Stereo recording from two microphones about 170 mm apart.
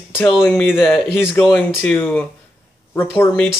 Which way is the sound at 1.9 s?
10° left (ahead or behind).